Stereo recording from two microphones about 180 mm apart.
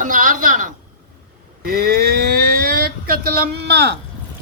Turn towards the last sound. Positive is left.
turn(degrees=-65)  # may be behind; listen again after turning